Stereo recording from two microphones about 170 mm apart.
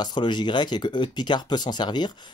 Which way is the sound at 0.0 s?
25° left (ahead or behind).